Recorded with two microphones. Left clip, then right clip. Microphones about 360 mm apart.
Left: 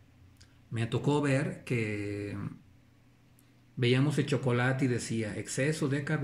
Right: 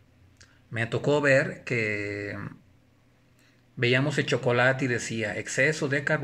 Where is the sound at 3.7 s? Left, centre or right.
Centre.